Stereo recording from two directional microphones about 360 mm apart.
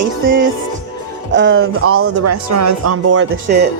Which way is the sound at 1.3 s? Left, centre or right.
Right.